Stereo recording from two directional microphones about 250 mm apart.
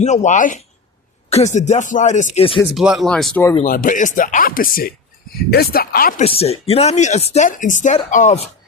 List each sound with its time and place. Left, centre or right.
0.0 s speech: left
2.6 s speech: centre
3.5 s speech: left
6.2 s speech: left